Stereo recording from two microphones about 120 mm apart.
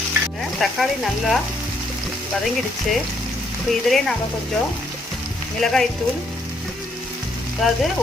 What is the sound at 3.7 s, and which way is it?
Speech, centre (ahead or behind).